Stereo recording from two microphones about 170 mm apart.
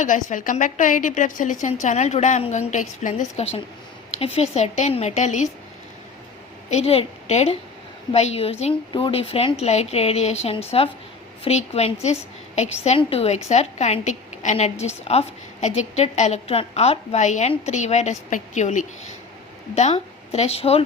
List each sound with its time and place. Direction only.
0.0 s a woman's voice: 50° left (ahead or behind)
6.7 s a woman's voice: 40° left (ahead or behind)